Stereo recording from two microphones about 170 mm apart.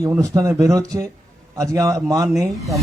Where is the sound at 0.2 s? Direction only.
15° right (ahead or behind).